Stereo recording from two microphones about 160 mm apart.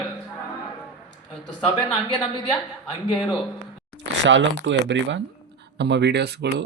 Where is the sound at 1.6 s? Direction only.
30° left (ahead or behind).